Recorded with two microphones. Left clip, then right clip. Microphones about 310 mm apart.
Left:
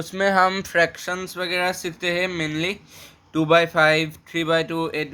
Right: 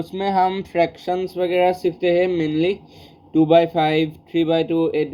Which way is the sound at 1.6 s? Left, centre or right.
Left.